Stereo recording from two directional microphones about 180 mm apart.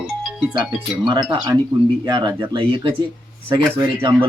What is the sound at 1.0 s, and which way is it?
Speech, 25° right (ahead or behind).